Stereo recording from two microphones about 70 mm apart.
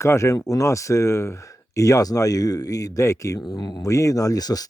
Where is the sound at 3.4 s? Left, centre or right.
Left.